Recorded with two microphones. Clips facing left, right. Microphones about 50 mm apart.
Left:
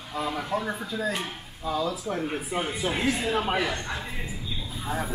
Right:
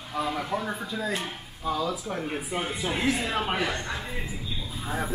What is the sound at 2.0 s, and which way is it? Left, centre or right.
A man's voice, centre.